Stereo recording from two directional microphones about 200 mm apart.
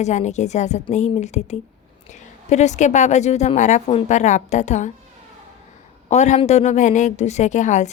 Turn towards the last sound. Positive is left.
turn(degrees=35)  # may be behind; listen again after turning